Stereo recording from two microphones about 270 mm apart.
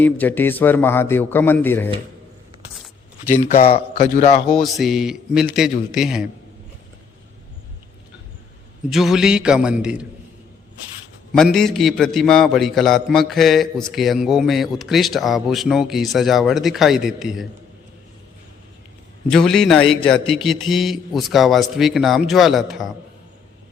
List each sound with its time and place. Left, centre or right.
0.0 s a man's voice: centre
3.5 s a man's voice: left
4.4 s a man's voice: centre
8.9 s a man's voice: centre
11.3 s a man's voice: centre
19.3 s a man's voice: centre